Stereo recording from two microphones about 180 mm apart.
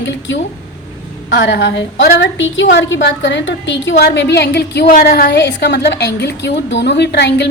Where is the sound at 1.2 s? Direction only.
70° left (ahead or behind).